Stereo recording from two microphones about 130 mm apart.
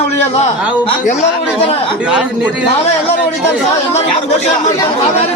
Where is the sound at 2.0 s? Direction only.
5° right (ahead or behind).